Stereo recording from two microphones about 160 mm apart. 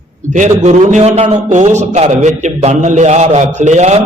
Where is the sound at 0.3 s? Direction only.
50° right (ahead or behind).